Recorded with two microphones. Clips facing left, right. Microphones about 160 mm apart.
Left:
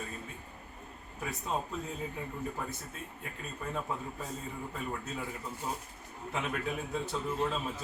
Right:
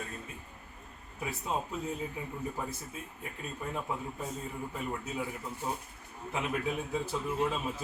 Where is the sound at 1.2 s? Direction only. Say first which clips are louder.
Right 1 dB; centre (ahead or behind).